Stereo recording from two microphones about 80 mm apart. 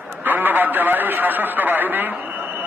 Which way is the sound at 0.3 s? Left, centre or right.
Right.